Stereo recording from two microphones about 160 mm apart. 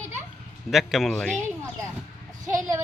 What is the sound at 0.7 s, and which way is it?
Speech, centre (ahead or behind).